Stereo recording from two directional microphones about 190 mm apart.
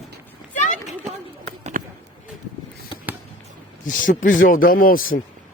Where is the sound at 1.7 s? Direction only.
45° right (ahead or behind).